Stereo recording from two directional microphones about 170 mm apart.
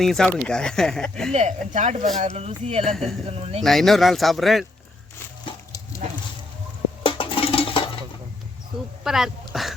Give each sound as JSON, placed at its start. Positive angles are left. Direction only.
{"t": 0.0, "sound": "speech", "side_deg": 0}
{"t": 1.3, "sound": "speech", "side_deg": -45}
{"t": 3.6, "sound": "speech", "side_deg": 0}
{"t": 7.0, "sound": "a sound", "side_deg": 30}
{"t": 9.0, "sound": "speech", "side_deg": 0}